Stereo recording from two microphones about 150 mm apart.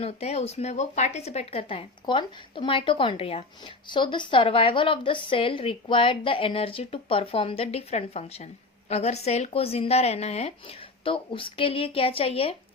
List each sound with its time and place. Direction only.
0.0 s speech: 45° left (ahead or behind)